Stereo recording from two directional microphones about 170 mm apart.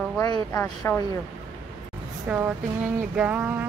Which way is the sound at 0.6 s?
10° left (ahead or behind).